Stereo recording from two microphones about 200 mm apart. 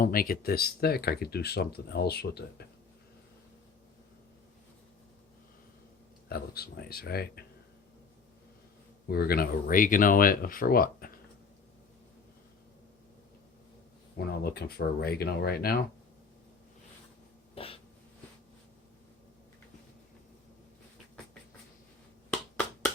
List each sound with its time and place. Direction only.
0.0 s speech: 45° left (ahead or behind)
6.2 s speech: 50° left (ahead or behind)
9.0 s speech: 50° left (ahead or behind)
14.2 s speech: 50° left (ahead or behind)
17.5 s throat clearing: 30° left (ahead or behind)
22.3 s finger snapping: 5° left (ahead or behind)